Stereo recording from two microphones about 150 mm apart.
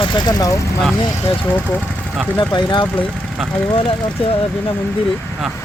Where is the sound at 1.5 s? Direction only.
15° left (ahead or behind).